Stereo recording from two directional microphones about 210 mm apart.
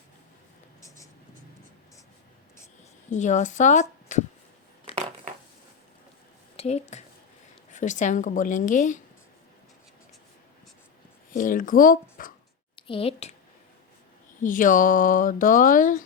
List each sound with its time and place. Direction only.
0.8 s writing: 15° left (ahead or behind)
3.1 s speech: 35° left (ahead or behind)
6.6 s speech: 30° left (ahead or behind)
11.3 s speech: 40° left (ahead or behind)
12.9 s a sound: 25° left (ahead or behind)
14.4 s speech: 40° left (ahead or behind)